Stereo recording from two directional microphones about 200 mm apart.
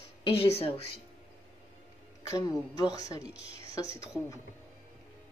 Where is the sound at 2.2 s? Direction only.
15° left (ahead or behind).